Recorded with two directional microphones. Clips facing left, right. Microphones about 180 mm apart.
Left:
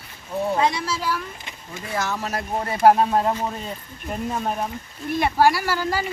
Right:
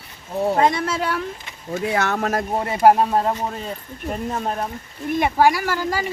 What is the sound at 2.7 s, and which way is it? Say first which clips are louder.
A man's voice: right 1 dB; 10° right (ahead or behind).